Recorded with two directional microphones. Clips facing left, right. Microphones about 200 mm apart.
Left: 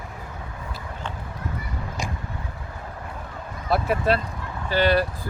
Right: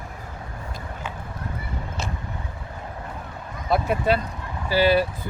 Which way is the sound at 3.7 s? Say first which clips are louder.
Even; centre (ahead or behind).